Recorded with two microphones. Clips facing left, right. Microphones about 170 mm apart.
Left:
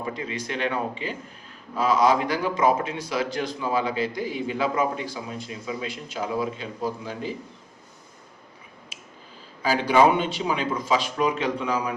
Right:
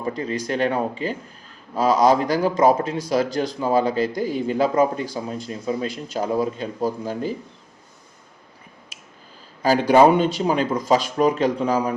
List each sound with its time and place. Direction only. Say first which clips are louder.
0.0 s speech: right 5 dB; 40° right (ahead or behind)
9.6 s speech: right 5 dB; 40° right (ahead or behind)